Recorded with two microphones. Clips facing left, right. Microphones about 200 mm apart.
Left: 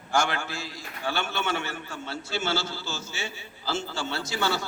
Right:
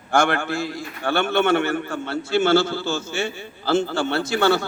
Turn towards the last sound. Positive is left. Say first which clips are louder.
# right 9 dB
turn(degrees=-60)  # may be behind; listen again after turning